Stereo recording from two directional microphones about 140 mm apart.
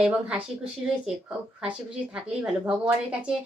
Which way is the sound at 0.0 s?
5° right (ahead or behind).